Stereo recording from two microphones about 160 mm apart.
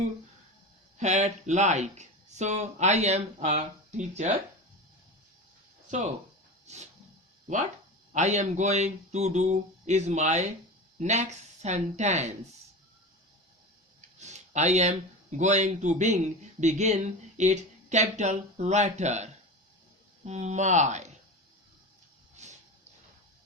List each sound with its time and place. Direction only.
0.9 s speech: 45° right (ahead or behind)
5.9 s speech: 50° right (ahead or behind)
8.1 s speech: 45° right (ahead or behind)
14.2 s a sound: 45° right (ahead or behind)
15.4 s speech: 45° right (ahead or behind)